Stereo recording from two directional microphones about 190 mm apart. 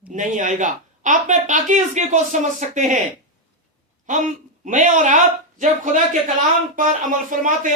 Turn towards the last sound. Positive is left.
turn(degrees=-45)  # may be behind; listen again after turning